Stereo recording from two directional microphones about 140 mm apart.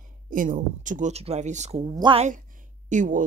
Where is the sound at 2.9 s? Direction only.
65° right (ahead or behind).